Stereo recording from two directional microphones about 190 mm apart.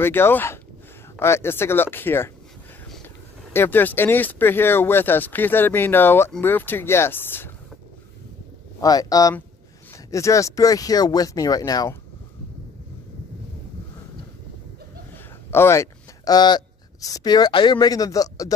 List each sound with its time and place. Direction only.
0.0 s speech: 10° left (ahead or behind)
3.5 s speech: 10° left (ahead or behind)
8.8 s speech: 20° left (ahead or behind)
15.5 s speech: 15° left (ahead or behind)